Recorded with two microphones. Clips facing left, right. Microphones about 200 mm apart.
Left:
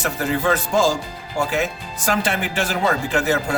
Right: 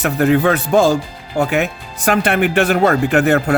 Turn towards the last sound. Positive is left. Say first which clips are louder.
# right 7 dB
turn(degrees=-60)  # may be behind; listen again after turning